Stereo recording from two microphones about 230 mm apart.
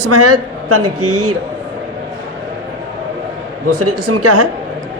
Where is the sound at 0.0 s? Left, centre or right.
Right.